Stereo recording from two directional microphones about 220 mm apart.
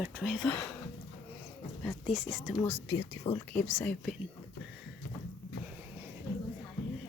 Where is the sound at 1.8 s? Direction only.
Centre (ahead or behind).